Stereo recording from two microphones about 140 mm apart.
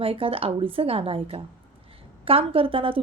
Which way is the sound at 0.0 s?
40° right (ahead or behind).